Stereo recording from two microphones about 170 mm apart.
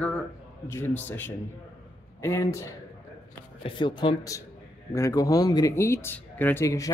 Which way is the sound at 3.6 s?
30° left (ahead or behind).